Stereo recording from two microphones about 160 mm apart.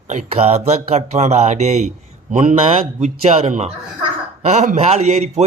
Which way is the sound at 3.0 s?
40° right (ahead or behind).